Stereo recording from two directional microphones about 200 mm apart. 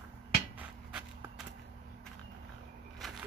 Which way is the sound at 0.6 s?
5° right (ahead or behind).